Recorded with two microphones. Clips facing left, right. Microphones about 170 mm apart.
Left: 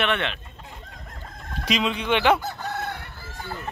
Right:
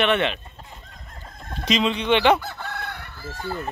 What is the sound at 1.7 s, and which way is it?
Speech, 5° left (ahead or behind).